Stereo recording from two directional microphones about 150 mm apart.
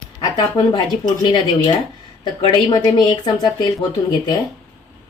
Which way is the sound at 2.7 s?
25° left (ahead or behind).